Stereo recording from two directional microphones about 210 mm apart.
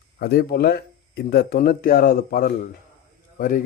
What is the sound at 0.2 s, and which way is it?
Speech, 45° left (ahead or behind).